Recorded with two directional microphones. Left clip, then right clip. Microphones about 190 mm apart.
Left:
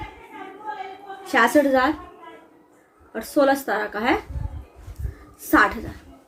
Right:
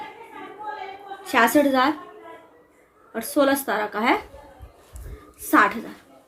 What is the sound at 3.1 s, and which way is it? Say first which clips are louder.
A woman's voice: left 1 dB; 35° right (ahead or behind).